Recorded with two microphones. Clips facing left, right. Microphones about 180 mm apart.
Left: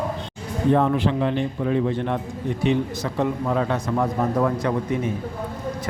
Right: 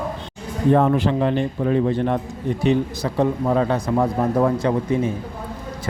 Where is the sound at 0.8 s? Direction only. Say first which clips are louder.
Right 3 dB; 40° right (ahead or behind).